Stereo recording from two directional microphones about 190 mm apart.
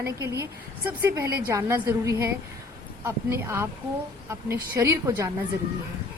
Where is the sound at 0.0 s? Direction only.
15° right (ahead or behind).